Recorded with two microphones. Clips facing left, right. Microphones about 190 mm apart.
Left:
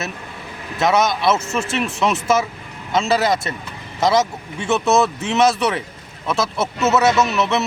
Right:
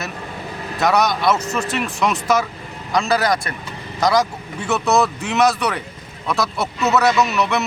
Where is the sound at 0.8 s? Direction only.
Centre (ahead or behind).